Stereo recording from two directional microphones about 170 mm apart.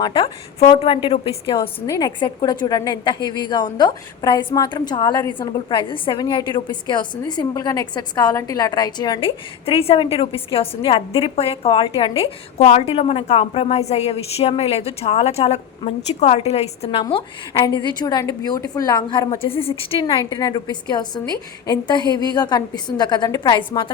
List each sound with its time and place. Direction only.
0.0 s a woman's voice: 30° left (ahead or behind)
1.9 s a woman's voice: 20° left (ahead or behind)
19.3 s a woman's voice: 35° left (ahead or behind)